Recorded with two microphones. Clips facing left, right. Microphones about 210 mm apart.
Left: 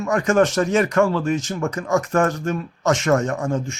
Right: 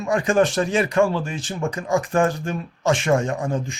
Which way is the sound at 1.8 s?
15° right (ahead or behind).